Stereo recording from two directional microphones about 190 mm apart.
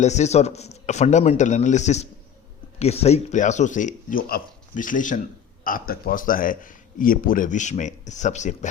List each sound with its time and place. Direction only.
0.0 s speech: 35° left (ahead or behind)